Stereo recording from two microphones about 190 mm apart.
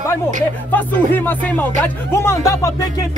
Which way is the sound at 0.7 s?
10° left (ahead or behind).